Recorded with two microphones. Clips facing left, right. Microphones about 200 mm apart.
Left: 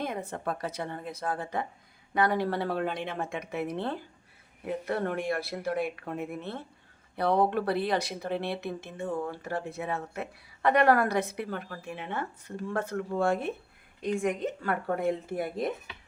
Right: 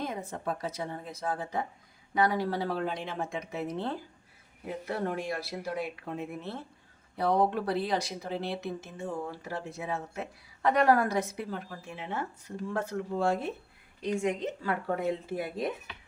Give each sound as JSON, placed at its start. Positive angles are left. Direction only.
{"t": 0.0, "sound": "speech", "side_deg": 60}